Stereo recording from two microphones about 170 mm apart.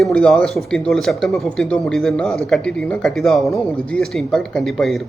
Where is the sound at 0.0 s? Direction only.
5° left (ahead or behind).